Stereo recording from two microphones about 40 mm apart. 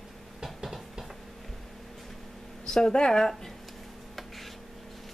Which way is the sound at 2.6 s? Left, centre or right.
Centre.